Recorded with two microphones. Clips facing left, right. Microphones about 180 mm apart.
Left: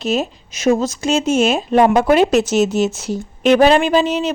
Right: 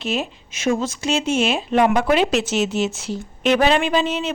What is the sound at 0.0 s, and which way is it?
Speech, 40° left (ahead or behind).